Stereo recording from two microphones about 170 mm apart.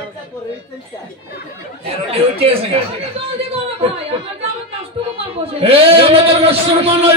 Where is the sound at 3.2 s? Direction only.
35° right (ahead or behind).